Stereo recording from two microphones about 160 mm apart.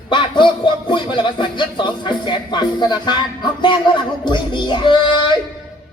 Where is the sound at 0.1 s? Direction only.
30° left (ahead or behind).